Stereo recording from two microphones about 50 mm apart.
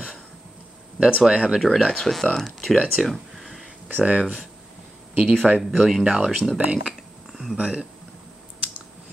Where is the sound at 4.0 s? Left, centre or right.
Right.